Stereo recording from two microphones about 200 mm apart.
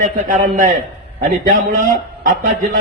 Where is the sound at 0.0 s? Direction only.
40° right (ahead or behind).